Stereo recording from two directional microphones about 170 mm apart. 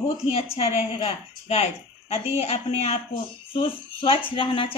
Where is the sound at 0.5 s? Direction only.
35° left (ahead or behind).